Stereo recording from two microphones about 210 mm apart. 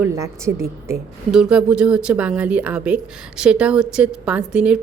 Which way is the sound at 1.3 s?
5° right (ahead or behind).